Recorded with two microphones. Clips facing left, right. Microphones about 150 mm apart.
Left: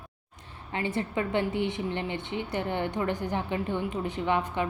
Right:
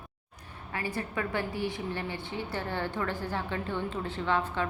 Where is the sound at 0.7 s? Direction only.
20° left (ahead or behind).